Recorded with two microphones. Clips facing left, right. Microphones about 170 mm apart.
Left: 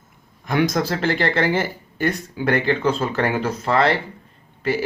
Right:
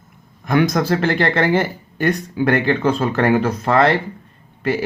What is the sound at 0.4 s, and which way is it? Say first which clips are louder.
Speech: right 3 dB; 50° right (ahead or behind).